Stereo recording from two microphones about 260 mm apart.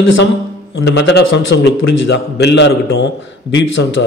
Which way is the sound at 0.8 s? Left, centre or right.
Left.